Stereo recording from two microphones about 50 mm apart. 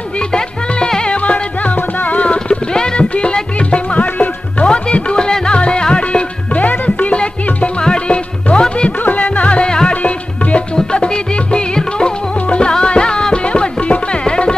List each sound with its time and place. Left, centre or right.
0.3 s music: centre
9.0 s music: left